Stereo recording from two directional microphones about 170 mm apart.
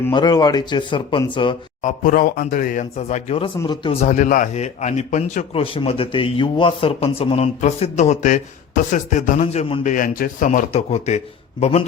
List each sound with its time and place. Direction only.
0.1 s speech: 25° left (ahead or behind)
1.8 s speech: 55° left (ahead or behind); by 3.5 s 35° left (ahead or behind)
3.6 s speech: 25° left (ahead or behind)
4.0 s speech: 45° left (ahead or behind)
5.7 s speech: 35° left (ahead or behind)
9.8 s speech: 50° left (ahead or behind)
10.7 s speech: 40° left (ahead or behind)